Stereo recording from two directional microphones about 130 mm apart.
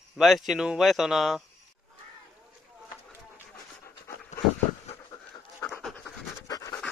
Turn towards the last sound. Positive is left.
turn(degrees=25)  # may be behind; listen again after turning